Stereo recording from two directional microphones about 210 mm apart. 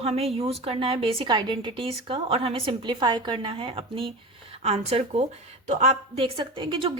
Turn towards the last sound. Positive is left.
turn(degrees=-25)  # may be behind; listen again after turning